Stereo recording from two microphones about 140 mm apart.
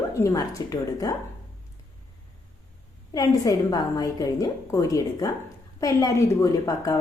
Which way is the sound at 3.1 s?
25° left (ahead or behind).